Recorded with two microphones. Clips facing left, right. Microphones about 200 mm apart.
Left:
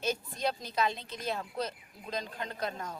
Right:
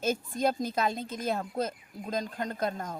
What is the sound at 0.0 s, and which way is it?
A woman's voice, 50° right (ahead or behind).